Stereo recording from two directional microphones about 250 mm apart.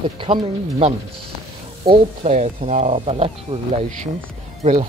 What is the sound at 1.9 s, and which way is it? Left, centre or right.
Speech, right.